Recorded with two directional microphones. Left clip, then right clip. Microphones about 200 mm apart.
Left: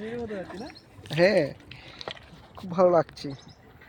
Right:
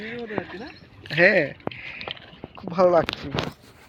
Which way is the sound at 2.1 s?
5° right (ahead or behind).